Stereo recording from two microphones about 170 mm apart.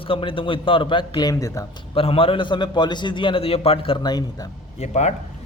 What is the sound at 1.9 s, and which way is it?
Speech, 35° left (ahead or behind).